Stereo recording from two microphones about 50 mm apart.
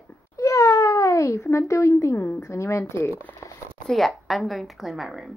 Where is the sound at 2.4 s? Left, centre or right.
Left.